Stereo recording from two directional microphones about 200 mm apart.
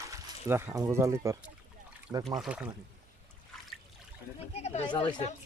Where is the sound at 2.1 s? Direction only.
5° right (ahead or behind).